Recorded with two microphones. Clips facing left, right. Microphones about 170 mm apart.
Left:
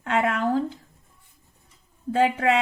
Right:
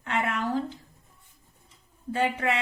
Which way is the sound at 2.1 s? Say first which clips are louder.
Left 6 dB; 55° left (ahead or behind).